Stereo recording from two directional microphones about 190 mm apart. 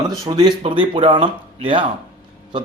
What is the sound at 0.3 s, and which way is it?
A man's voice, 20° right (ahead or behind).